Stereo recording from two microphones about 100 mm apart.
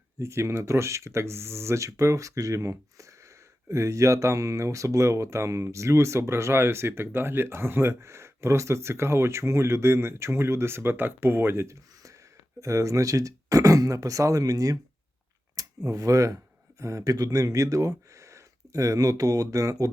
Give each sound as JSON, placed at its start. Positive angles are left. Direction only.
{"t": 0.2, "sound": "speech", "side_deg": -30}